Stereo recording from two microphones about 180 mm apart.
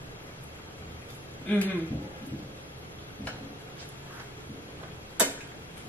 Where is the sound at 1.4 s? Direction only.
10° left (ahead or behind).